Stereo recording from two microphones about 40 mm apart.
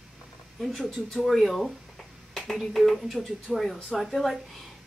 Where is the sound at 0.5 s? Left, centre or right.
Centre.